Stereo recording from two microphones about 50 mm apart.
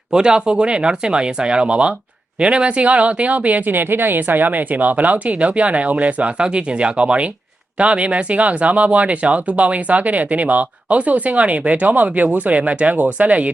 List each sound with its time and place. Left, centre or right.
0.1 s speech: centre